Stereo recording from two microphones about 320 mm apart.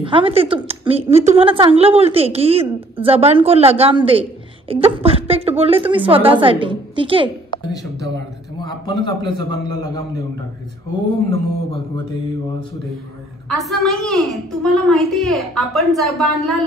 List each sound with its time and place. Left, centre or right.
0.0 s a woman's voice: centre
7.5 s a sound: centre
8.5 s a man's voice: centre
13.5 s a woman's voice: centre